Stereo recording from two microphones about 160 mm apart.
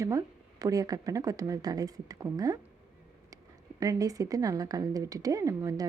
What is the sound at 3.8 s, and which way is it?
A woman's voice, 20° right (ahead or behind).